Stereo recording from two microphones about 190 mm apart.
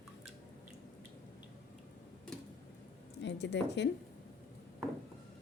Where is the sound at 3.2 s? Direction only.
65° left (ahead or behind).